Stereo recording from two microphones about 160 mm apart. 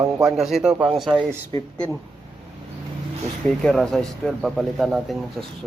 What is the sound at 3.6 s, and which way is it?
A man's voice, 5° left (ahead or behind).